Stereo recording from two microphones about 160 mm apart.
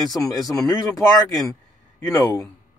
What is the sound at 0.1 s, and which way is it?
Speech, 25° left (ahead or behind).